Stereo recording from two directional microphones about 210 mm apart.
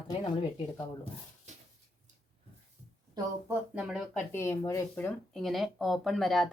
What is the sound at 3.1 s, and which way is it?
Speech, 10° right (ahead or behind).